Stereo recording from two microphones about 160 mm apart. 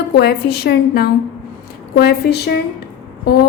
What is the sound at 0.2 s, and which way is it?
Speech, 85° left.